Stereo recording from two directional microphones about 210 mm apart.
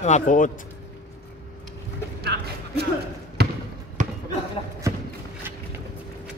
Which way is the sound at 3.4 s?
50° right (ahead or behind).